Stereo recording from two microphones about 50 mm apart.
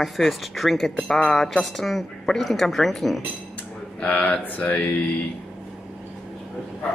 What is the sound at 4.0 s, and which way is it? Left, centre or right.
Mantra, left.